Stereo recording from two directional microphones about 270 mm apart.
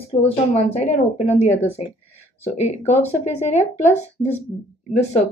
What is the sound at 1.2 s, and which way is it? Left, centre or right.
Speech, left.